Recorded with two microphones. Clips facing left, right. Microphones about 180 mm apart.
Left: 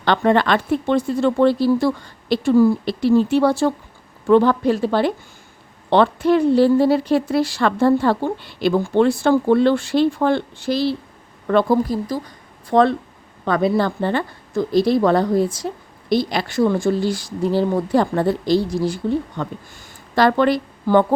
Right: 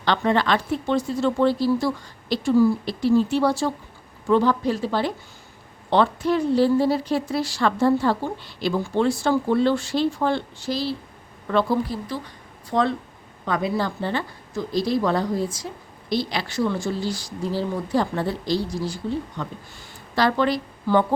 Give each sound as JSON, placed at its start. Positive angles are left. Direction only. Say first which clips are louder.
{"t": 0.0, "sound": "speech", "louder": "left 5 dB", "side_deg": 55}
{"t": 11.4, "sound": "speech", "louder": "left 5 dB", "side_deg": 50}
{"t": 12.7, "sound": "speech", "louder": "left 7 dB", "side_deg": 65}